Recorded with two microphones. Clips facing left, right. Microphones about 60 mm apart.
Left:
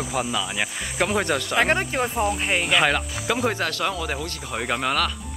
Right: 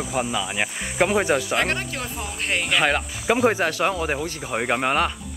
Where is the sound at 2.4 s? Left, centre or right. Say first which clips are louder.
Right 4 dB; centre.